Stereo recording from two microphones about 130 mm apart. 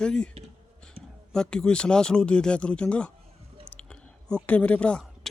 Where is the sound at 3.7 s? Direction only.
10° left (ahead or behind).